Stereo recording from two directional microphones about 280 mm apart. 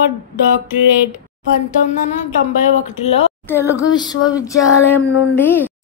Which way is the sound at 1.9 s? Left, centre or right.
Left.